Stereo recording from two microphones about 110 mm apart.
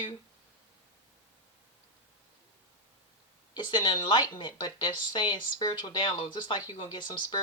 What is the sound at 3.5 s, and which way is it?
A woman's voice, 45° left (ahead or behind).